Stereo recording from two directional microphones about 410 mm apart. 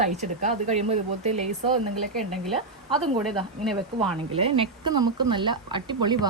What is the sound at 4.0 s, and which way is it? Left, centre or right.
Speech, centre.